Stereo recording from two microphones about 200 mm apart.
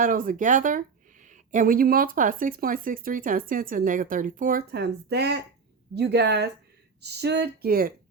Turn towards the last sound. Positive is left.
turn(degrees=-50)  # may be behind; listen again after turning